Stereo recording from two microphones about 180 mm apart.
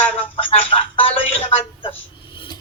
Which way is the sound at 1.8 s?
30° left (ahead or behind).